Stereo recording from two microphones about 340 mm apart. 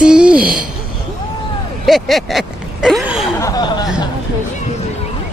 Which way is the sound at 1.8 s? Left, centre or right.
Centre.